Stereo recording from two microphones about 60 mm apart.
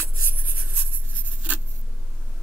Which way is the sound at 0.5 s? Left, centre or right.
Right.